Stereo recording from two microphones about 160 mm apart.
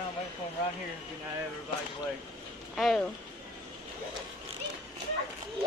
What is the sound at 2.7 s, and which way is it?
Speech, centre (ahead or behind).